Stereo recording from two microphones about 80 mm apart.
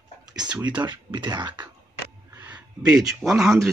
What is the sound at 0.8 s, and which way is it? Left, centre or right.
Speech, right.